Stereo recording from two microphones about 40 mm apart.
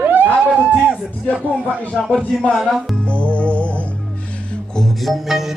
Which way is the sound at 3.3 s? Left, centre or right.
Left.